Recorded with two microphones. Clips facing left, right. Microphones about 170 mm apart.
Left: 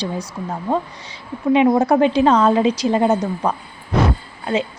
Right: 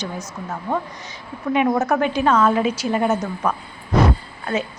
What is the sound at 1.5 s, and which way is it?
A woman's voice, 25° left (ahead or behind).